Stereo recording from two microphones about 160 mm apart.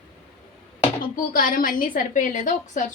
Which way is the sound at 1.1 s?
60° left (ahead or behind).